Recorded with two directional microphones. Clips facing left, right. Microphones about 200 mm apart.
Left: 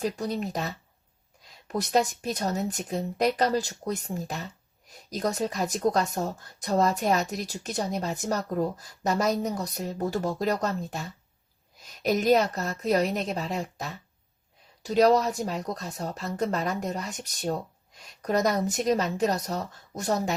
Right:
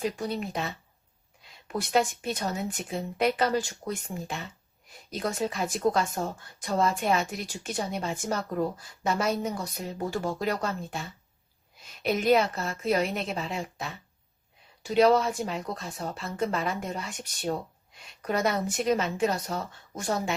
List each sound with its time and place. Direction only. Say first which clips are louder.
0.0 s a woman's voice: left 1 dB; 40° left (ahead or behind)